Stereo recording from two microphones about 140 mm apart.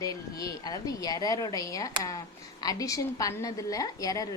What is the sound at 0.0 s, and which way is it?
A woman's voice, 25° left (ahead or behind).